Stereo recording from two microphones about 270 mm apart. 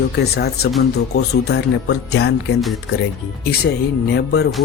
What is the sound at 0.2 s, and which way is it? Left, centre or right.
Speech, left.